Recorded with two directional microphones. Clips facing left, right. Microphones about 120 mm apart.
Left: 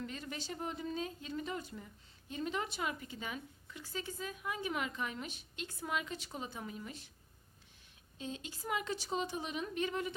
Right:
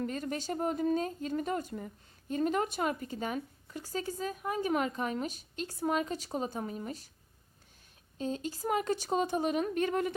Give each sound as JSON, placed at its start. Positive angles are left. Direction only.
{"t": 0.0, "sound": "speech", "side_deg": -45}
{"t": 8.2, "sound": "speech", "side_deg": -40}